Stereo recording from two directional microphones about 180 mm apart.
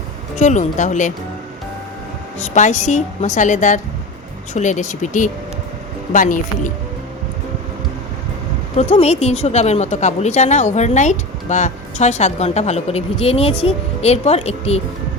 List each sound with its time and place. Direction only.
0.3 s speech: 40° left (ahead or behind)
2.6 s a woman's voice: 40° left (ahead or behind)
8.7 s a woman's voice: 35° left (ahead or behind)